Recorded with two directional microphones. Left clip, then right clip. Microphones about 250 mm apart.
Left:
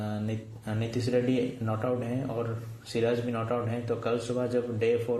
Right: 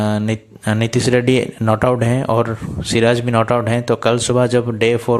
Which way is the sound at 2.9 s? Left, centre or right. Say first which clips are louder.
Right 14 dB; right.